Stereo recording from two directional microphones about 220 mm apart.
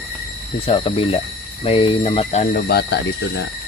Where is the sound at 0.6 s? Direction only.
25° left (ahead or behind); by 3.4 s 50° left (ahead or behind).